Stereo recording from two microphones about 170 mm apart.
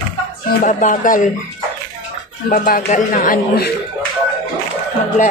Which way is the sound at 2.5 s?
55° left (ahead or behind).